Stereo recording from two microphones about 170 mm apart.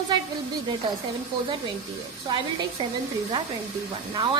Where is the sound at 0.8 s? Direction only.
30° right (ahead or behind).